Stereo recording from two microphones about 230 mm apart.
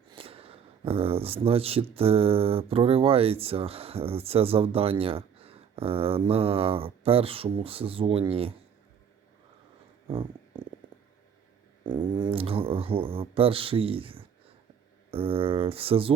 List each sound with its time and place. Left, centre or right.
0.1 s speech: right
11.8 s speech: centre